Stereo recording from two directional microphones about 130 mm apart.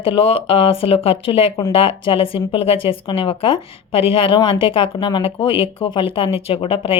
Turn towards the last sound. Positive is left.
turn(degrees=45)  # may be behind; listen again after turning